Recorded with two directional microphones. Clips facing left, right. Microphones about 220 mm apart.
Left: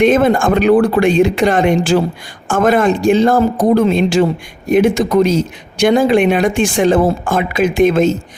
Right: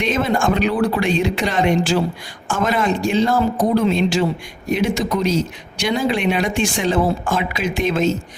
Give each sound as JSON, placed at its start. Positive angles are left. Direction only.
{"t": 0.0, "sound": "speech", "side_deg": 50}